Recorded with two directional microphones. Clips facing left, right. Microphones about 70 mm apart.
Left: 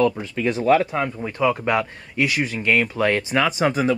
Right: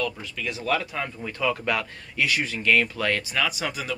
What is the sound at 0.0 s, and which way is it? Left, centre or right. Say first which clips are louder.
Speech: left 10 dB; left.